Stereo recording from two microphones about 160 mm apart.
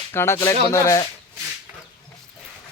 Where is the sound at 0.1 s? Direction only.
15° left (ahead or behind).